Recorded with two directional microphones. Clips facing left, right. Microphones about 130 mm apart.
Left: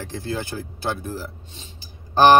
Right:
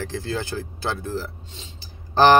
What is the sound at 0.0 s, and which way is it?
Speech, 20° left (ahead or behind).